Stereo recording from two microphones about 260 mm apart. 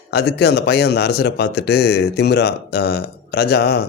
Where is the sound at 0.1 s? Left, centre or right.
Left.